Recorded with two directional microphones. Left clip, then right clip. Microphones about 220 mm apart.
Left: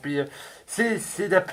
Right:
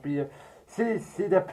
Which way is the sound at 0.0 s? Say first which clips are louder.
Left 4 dB; 25° left (ahead or behind).